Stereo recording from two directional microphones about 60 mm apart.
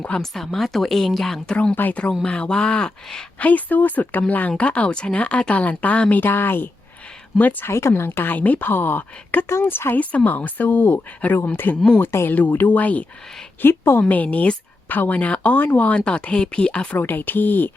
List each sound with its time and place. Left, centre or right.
0.2 s a woman's voice: centre
1.7 s a woman's voice: left
2.2 s a woman's voice: centre
3.3 s a woman's voice: left
7.7 s a woman's voice: left
10.0 s a woman's voice: left
13.6 s a woman's voice: left
14.1 s a woman's voice: left
17.0 s a woman's voice: left